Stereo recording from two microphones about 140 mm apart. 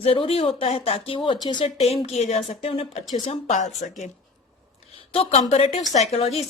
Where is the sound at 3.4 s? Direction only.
55° left (ahead or behind).